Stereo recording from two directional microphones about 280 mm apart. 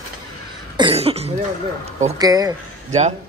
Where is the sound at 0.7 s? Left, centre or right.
Centre.